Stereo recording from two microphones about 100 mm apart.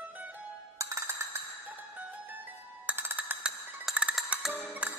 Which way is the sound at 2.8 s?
20° right (ahead or behind).